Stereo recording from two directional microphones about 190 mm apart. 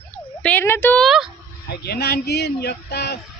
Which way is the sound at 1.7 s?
55° left (ahead or behind).